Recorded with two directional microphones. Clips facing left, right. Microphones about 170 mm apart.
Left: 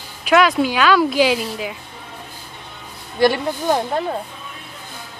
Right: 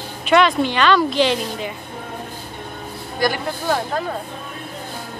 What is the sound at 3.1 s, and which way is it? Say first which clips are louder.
Speech: left 5 dB; 25° left (ahead or behind).